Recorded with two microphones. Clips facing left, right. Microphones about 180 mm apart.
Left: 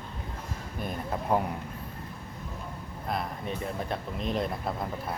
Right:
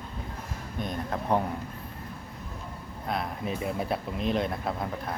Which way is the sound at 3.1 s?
Centre (ahead or behind).